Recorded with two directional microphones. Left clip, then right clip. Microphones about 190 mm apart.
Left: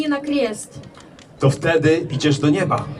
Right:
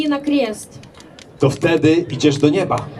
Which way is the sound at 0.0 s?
15° right (ahead or behind).